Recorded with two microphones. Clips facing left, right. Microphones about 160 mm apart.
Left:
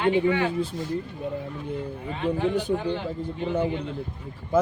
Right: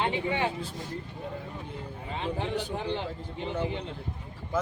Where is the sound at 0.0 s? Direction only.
25° right (ahead or behind).